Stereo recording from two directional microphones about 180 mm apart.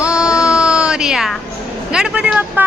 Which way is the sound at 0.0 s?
5° right (ahead or behind).